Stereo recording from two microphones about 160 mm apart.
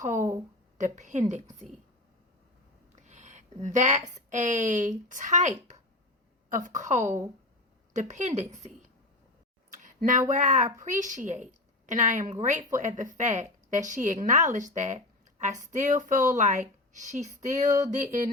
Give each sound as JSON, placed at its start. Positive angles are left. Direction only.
{"t": 0.0, "sound": "speech", "side_deg": -50}
{"t": 2.9, "sound": "a sound", "side_deg": -50}
{"t": 4.3, "sound": "speech", "side_deg": -50}
{"t": 9.7, "sound": "speech", "side_deg": -55}